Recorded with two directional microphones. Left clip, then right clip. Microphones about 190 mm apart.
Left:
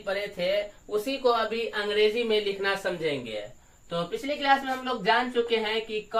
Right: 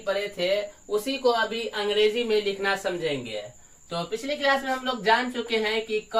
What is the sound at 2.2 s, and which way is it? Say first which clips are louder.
Speech: right 2 dB; 10° right (ahead or behind).